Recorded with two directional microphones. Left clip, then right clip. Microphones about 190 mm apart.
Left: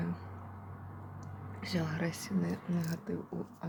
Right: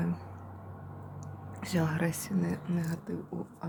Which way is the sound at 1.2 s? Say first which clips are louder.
Right 1 dB; 30° right (ahead or behind).